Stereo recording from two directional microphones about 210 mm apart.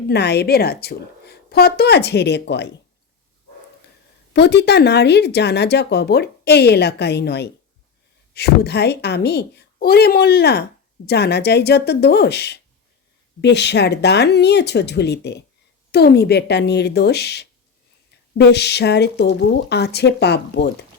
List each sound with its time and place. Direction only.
0.1 s a woman's voice: 50° left (ahead or behind)
4.4 s a woman's voice: 50° left (ahead or behind)